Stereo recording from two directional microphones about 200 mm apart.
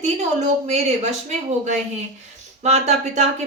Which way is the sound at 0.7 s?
35° right (ahead or behind).